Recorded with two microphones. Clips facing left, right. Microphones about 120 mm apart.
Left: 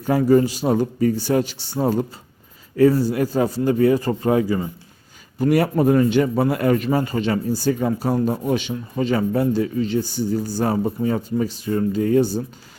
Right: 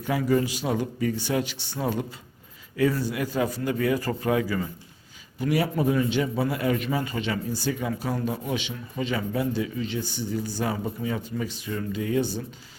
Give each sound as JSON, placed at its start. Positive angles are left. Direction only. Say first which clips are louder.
{"t": 0.0, "sound": "a man's voice", "louder": "left 8 dB", "side_deg": 40}
{"t": 5.4, "sound": "a man's voice", "louder": "left 7 dB", "side_deg": 50}